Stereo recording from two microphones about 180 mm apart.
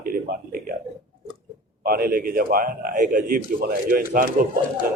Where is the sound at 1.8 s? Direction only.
55° right (ahead or behind).